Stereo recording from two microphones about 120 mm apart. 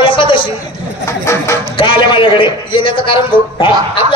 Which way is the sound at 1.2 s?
25° left (ahead or behind).